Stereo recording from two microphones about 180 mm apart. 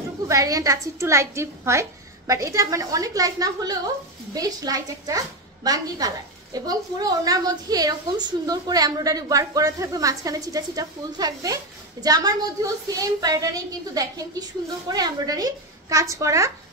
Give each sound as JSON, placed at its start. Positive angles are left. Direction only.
{"t": 0.3, "sound": "a woman's voice", "side_deg": -20}